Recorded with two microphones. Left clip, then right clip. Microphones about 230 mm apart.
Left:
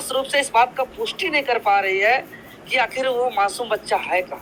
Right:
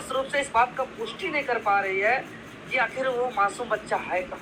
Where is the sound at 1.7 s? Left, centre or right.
Left.